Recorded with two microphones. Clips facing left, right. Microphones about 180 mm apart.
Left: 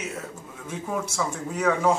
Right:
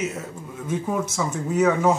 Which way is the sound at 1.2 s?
5° right (ahead or behind).